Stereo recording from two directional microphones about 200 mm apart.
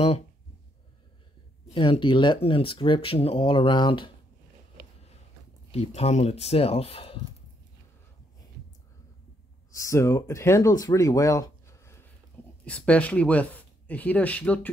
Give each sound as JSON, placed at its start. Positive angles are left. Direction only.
{"t": 1.7, "sound": "speech", "side_deg": 25}
{"t": 5.7, "sound": "speech", "side_deg": 30}
{"t": 9.7, "sound": "speech", "side_deg": 15}